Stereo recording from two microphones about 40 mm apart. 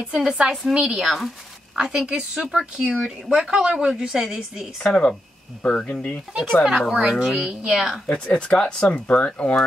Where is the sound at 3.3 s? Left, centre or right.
Right.